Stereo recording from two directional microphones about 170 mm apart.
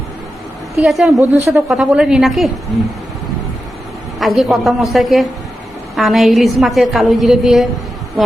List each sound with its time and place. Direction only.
0.8 s a woman's voice: centre (ahead or behind)
1.5 s a man's voice: 15° right (ahead or behind)
1.7 s a woman's voice: 5° right (ahead or behind)
4.2 s a woman's voice: centre (ahead or behind)